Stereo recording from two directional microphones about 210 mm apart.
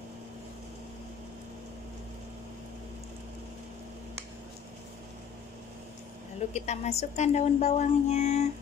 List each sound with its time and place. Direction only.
6.5 s a woman's voice: 35° left (ahead or behind)